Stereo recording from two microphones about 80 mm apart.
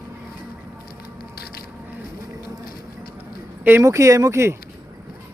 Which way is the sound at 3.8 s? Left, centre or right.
Right.